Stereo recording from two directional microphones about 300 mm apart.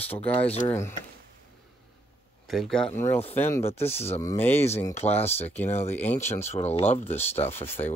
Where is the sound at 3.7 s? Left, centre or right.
Centre.